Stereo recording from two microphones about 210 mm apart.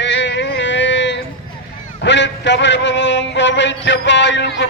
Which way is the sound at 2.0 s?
55° left (ahead or behind).